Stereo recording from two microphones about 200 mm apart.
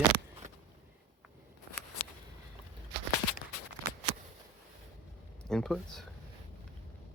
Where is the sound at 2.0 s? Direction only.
45° left (ahead or behind).